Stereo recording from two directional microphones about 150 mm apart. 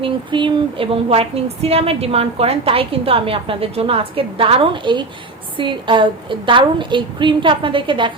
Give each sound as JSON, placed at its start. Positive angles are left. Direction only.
{"t": 0.0, "sound": "a woman's voice", "side_deg": -35}